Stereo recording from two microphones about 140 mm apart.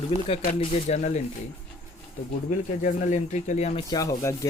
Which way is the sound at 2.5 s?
65° left (ahead or behind).